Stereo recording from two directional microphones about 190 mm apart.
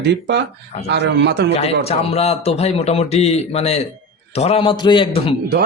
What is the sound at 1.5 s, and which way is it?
A man's voice, 35° left (ahead or behind).